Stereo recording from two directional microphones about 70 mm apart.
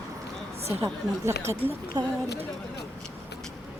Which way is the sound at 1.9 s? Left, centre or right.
Right.